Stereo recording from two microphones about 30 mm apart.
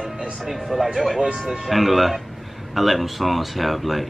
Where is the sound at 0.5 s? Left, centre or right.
Centre.